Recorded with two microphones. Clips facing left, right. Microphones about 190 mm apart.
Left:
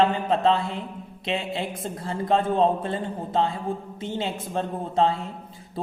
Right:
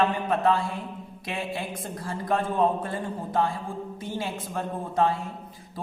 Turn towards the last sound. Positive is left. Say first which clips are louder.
# left 2 dB
turn(degrees=25)  # may be behind; listen again after turning